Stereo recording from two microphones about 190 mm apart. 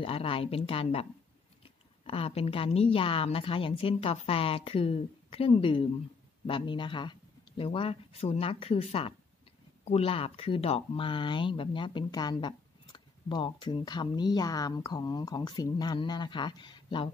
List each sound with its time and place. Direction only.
0.0 s speech: 30° left (ahead or behind)